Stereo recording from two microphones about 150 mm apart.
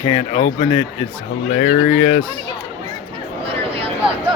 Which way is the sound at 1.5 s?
90° left.